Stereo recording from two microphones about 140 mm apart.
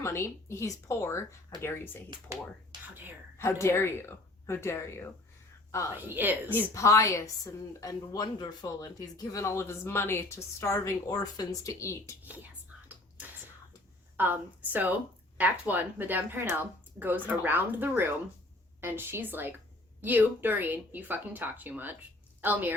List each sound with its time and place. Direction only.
0.0 s a woman's voice: 20° left (ahead or behind)
3.3 s a woman's voice: 20° left (ahead or behind)
6.1 s speech: 15° right (ahead or behind)
6.5 s a woman's voice: 20° left (ahead or behind)
12.2 s speech: 10° right (ahead or behind)
12.9 s whispering: 10° right (ahead or behind)
14.2 s a woman's voice: 15° right (ahead or behind)